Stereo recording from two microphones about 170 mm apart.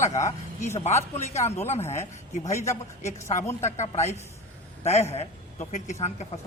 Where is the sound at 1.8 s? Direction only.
15° left (ahead or behind).